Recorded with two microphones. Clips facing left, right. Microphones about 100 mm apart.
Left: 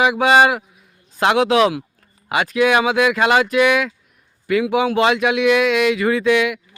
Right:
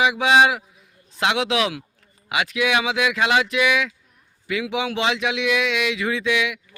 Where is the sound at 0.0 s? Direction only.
50° left (ahead or behind).